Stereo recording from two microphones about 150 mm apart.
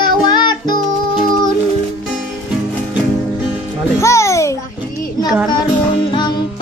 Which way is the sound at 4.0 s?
20° left (ahead or behind).